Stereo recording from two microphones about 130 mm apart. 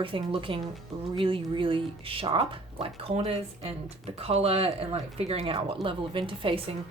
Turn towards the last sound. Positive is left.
turn(degrees=-45)  # may be behind; listen again after turning